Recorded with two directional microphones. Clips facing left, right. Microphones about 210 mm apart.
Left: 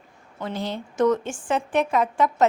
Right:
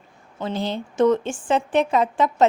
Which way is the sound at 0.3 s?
30° right (ahead or behind).